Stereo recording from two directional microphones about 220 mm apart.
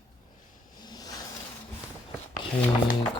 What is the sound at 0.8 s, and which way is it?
Vehicle, 15° left (ahead or behind).